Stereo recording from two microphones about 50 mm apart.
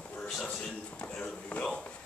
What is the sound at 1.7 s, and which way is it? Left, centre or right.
Speech, centre.